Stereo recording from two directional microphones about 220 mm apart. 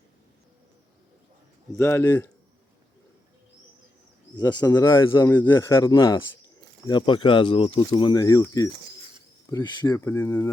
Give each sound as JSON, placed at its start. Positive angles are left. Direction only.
{"t": 1.7, "sound": "a man's voice", "side_deg": 10}
{"t": 4.4, "sound": "a man's voice", "side_deg": 20}